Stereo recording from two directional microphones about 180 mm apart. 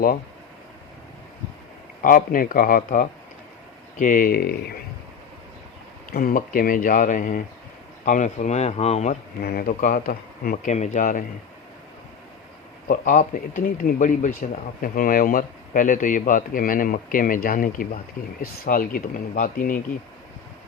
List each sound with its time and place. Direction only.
2.0 s speech: 50° left (ahead or behind)
6.1 s speech: 55° left (ahead or behind); by 9.1 s 35° left (ahead or behind)
9.4 s speech: 60° left (ahead or behind)
12.9 s speech: 45° left (ahead or behind)